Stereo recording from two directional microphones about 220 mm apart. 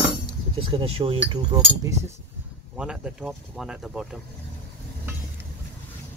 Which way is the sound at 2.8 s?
5° right (ahead or behind).